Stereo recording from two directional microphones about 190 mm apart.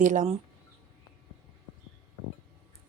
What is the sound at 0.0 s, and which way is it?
Speech, 40° right (ahead or behind).